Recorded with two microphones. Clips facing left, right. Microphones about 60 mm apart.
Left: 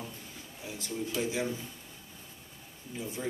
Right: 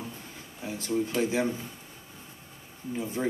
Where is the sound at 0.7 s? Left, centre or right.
Right.